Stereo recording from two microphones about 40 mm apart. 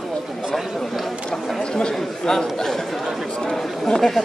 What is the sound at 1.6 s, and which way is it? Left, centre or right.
Chatter, left.